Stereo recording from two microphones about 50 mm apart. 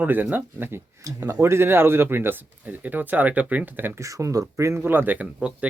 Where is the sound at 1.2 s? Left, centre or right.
Right.